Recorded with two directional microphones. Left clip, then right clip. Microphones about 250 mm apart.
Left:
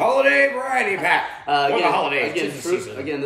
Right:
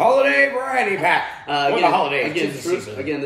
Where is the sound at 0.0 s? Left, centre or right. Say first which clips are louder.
Right 1 dB; centre.